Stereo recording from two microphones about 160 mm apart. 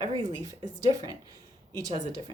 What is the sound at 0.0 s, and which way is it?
Speech, 25° right (ahead or behind).